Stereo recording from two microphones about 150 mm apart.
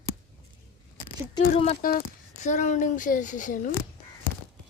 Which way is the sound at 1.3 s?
40° left (ahead or behind).